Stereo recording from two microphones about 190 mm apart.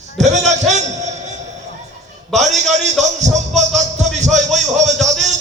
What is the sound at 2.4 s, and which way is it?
Speech, 40° right (ahead or behind).